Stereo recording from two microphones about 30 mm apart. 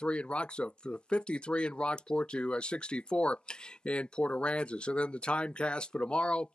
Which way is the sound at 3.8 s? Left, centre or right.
Left.